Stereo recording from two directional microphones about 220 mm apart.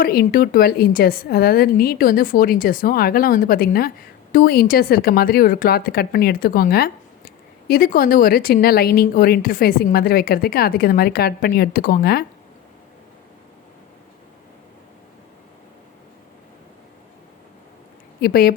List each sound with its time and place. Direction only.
0.0 s a woman's voice: 45° left (ahead or behind)
18.2 s a woman's voice: 45° left (ahead or behind)